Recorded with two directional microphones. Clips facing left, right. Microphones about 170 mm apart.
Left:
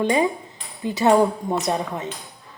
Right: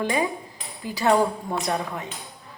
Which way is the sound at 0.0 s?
20° left (ahead or behind).